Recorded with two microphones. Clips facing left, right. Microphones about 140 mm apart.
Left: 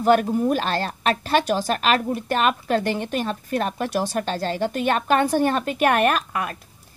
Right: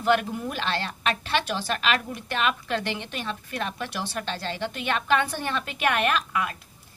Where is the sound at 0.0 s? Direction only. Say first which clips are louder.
Left 6 dB; 40° left (ahead or behind).